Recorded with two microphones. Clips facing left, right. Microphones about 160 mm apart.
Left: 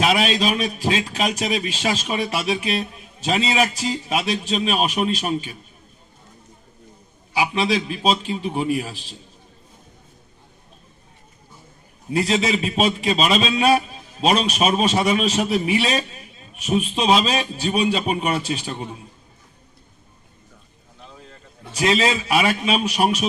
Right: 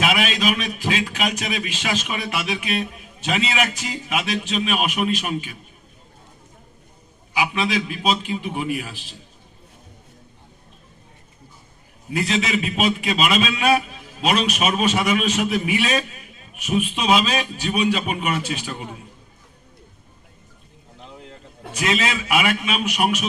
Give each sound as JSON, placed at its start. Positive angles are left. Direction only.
{"t": 0.0, "sound": "a man's voice", "side_deg": 35}
{"t": 7.3, "sound": "a man's voice", "side_deg": 35}
{"t": 12.1, "sound": "a man's voice", "side_deg": 35}
{"t": 21.8, "sound": "a man's voice", "side_deg": 30}